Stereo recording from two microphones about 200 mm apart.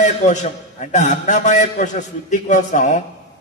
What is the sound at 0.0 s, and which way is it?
A man's voice, 40° left (ahead or behind).